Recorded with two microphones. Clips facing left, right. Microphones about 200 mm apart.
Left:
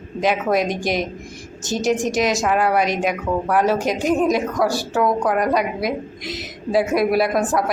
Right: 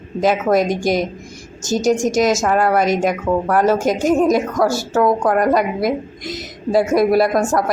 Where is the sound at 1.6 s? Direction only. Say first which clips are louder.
Right 4 dB; centre (ahead or behind).